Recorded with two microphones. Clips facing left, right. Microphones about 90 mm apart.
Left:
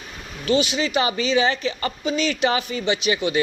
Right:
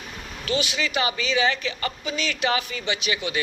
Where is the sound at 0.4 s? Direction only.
30° left (ahead or behind).